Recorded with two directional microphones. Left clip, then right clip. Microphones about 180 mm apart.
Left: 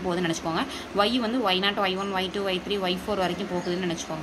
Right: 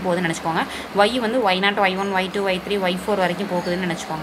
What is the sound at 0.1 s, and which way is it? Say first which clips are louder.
A woman's voice: right 6 dB; 20° left (ahead or behind).